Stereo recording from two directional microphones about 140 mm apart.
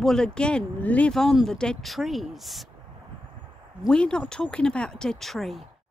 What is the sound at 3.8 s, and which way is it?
Speech, 5° left (ahead or behind).